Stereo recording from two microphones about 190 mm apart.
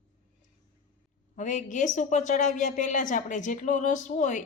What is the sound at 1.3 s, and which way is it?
A woman's voice, 40° left (ahead or behind).